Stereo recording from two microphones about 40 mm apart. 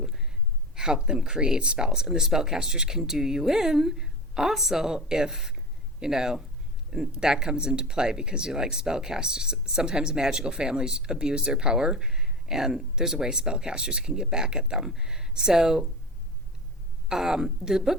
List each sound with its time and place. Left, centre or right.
0.0 s a sound: centre
0.8 s speech: centre
17.1 s speech: centre